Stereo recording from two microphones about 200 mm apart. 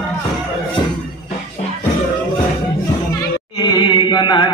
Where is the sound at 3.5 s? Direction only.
20° left (ahead or behind).